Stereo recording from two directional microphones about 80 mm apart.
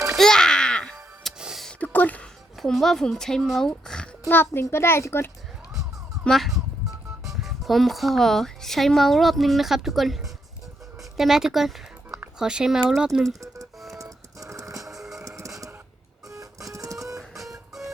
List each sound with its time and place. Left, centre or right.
0.2 s music: centre
0.9 s music: centre
1.8 s a sound: left
2.6 s speech: centre
4.3 s a child's voice: left
6.2 s music: centre
7.4 s a woman's voice: centre
13.7 s printer: centre
14.0 s music: right
14.8 s music: centre
15.2 s music: right
16.3 s printer: right
17.2 s music: centre